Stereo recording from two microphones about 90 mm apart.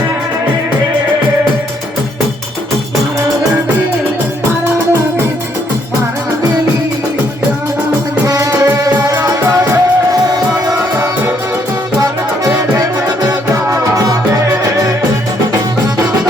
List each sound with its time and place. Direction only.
8.3 s music: 35° right (ahead or behind)
13.2 s music: 40° right (ahead or behind)